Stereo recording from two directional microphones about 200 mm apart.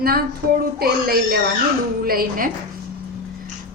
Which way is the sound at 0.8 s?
50° right (ahead or behind).